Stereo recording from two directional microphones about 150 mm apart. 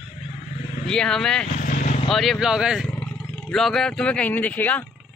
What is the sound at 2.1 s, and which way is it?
Speech, centre (ahead or behind).